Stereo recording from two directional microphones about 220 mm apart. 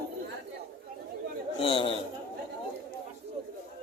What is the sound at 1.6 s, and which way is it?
Speech, 25° left (ahead or behind).